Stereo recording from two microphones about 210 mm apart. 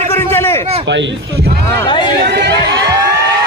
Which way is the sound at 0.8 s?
60° right (ahead or behind).